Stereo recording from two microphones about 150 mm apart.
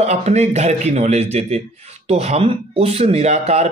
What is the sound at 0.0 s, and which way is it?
Speech, 50° right (ahead or behind).